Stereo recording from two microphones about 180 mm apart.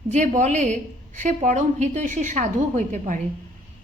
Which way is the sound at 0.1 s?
40° right (ahead or behind).